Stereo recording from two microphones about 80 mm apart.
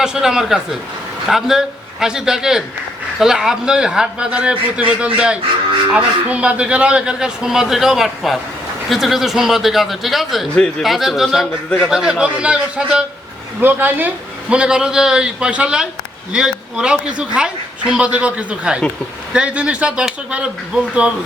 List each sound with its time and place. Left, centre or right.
0.0 s a woman's voice: centre
10.5 s speech: centre
10.8 s a woman's voice: centre
13.6 s a woman's voice: right
14.5 s a woman's voice: centre